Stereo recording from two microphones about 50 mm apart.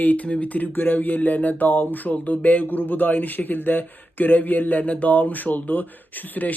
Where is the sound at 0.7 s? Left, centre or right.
Left.